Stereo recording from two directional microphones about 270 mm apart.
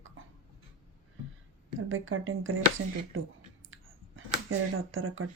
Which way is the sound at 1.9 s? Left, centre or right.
Right.